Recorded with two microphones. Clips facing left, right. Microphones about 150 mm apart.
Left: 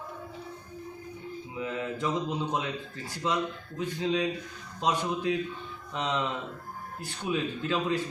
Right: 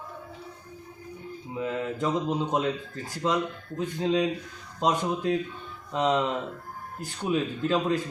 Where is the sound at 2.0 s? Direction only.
45° right (ahead or behind).